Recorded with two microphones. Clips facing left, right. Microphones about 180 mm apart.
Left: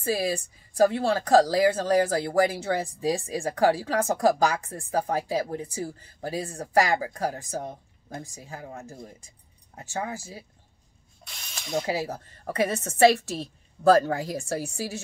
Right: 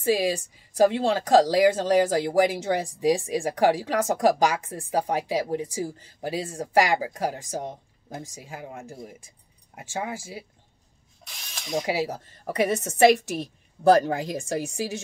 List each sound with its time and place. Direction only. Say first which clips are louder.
0.0 s speech: right 3 dB; 15° right (ahead or behind)
11.2 s speech: right 2 dB; centre (ahead or behind)
11.8 s speech: right 2 dB; 15° right (ahead or behind)